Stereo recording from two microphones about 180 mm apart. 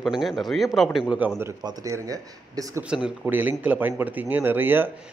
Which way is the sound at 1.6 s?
20° right (ahead or behind).